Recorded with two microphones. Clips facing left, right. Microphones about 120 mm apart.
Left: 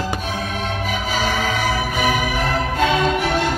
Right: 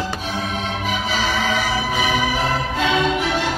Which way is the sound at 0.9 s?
50° left (ahead or behind).